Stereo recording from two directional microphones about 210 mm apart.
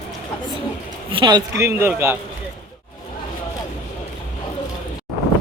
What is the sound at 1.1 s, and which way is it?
A man's voice, 20° right (ahead or behind).